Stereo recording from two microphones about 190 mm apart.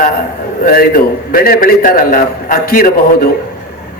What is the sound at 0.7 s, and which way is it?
A man's voice, 50° left (ahead or behind).